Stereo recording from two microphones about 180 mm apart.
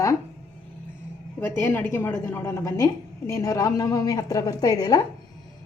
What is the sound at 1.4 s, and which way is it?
A woman's voice, 10° left (ahead or behind).